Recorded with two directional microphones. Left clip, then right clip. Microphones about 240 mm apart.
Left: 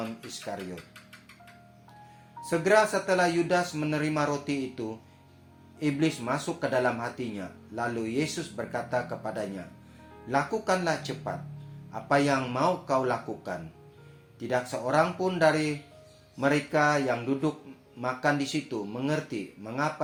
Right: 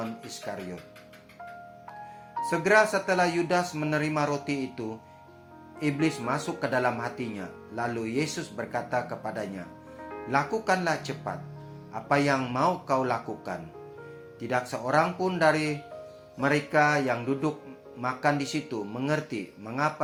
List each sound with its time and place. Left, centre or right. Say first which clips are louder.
0.5 s speech: even; right
2.5 s speech: right 1 dB; right